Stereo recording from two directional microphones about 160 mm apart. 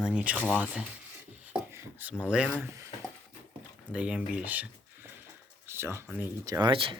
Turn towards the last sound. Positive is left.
turn(degrees=-30)  # may be behind; listen again after turning